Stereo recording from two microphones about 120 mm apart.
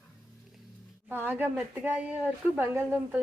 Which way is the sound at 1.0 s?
15° right (ahead or behind).